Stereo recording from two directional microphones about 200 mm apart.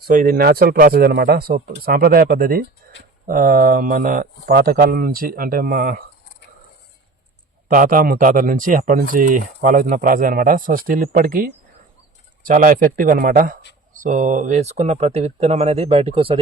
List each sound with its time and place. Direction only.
0.0 s speech: 45° right (ahead or behind)
7.7 s speech: 45° right (ahead or behind); by 16.4 s 30° right (ahead or behind)